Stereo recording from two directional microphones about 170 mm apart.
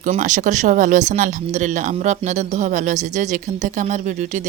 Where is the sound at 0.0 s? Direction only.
50° right (ahead or behind).